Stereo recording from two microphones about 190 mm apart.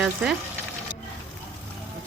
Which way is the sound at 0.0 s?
5° right (ahead or behind).